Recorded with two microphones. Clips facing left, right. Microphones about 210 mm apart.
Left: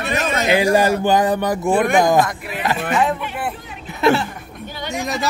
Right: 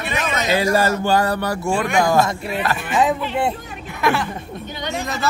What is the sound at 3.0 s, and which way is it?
Speech, 20° right (ahead or behind).